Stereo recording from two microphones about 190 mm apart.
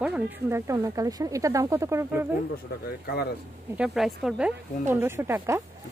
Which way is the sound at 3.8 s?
Centre (ahead or behind).